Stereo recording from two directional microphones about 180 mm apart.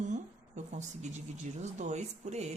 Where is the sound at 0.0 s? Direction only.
40° right (ahead or behind).